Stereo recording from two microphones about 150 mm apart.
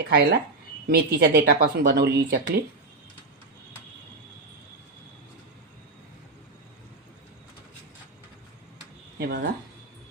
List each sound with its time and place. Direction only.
0.0 s speech: 90° right
9.1 s speech: 90° right